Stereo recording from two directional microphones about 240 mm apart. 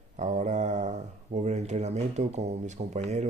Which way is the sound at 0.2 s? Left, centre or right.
Right.